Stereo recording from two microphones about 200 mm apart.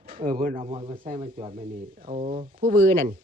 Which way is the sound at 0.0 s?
45° right (ahead or behind).